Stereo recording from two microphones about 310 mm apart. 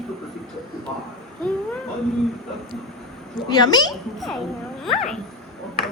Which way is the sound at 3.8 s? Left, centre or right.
Centre.